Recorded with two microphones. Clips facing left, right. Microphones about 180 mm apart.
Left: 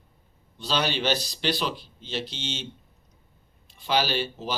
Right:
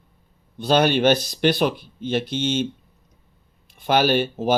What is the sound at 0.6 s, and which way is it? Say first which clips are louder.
Speech: right 10 dB; 55° right (ahead or behind).